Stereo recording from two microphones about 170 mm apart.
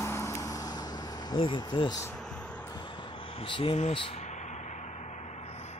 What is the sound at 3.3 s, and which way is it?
Speech, 30° left (ahead or behind).